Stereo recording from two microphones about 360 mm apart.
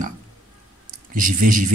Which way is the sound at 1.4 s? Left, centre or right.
Right.